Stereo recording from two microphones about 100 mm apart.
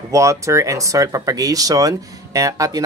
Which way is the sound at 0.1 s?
30° right (ahead or behind).